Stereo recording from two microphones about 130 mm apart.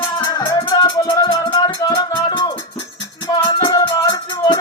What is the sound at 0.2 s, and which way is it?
Music, 35° left (ahead or behind).